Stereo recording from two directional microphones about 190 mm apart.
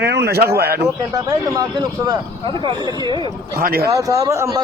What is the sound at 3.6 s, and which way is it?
Speech, 50° right (ahead or behind).